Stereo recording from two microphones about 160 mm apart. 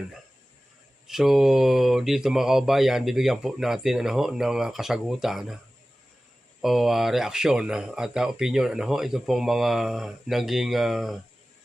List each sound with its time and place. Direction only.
1.0 s speech: centre (ahead or behind)
6.6 s speech: centre (ahead or behind)